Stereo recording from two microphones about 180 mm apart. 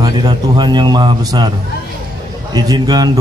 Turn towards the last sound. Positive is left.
turn(degrees=-20)  # may be behind; listen again after turning